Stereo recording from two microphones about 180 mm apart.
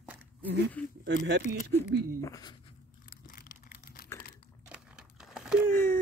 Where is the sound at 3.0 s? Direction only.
50° left (ahead or behind).